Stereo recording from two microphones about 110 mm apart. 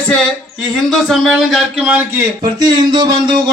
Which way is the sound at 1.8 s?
20° right (ahead or behind).